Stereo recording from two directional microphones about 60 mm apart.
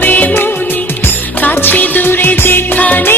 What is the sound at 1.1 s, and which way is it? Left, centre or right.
Music, left.